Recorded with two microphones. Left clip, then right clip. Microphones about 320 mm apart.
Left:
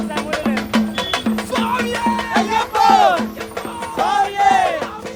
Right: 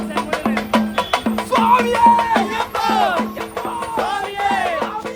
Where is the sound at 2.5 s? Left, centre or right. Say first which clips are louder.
Left 5 dB; centre.